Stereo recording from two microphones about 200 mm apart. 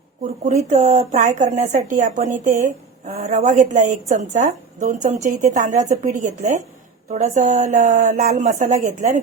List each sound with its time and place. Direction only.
0.4 s a woman's voice: 35° right (ahead or behind)